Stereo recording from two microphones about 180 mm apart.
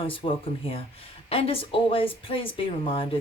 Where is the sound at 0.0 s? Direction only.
30° left (ahead or behind).